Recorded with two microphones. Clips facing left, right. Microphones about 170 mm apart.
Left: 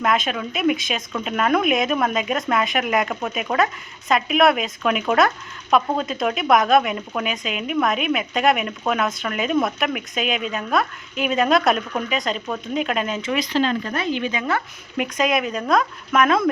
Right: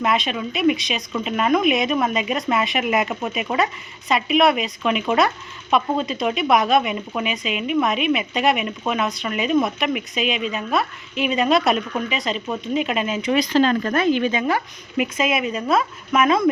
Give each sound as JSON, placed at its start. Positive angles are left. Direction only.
{"t": 0.0, "sound": "speech", "side_deg": 0}
{"t": 13.3, "sound": "speech", "side_deg": -40}
{"t": 14.9, "sound": "speech", "side_deg": 0}